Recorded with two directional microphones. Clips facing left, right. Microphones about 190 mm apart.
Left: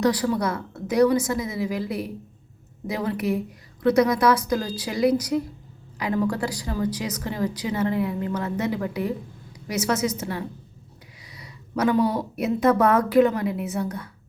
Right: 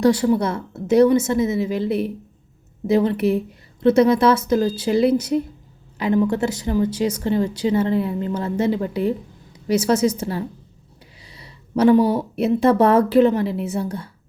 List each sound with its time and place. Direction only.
0.0 s speech: 25° right (ahead or behind)